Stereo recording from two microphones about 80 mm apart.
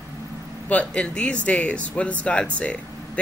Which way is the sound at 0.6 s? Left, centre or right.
Centre.